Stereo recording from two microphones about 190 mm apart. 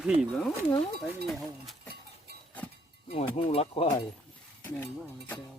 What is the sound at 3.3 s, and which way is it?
Speech, 35° left (ahead or behind).